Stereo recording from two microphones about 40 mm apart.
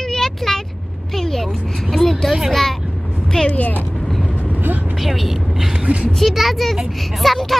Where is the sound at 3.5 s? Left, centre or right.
Left.